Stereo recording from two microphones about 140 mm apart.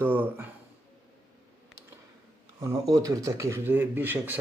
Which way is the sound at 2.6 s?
25° right (ahead or behind).